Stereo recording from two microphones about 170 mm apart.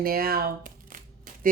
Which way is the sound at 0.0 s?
60° right (ahead or behind).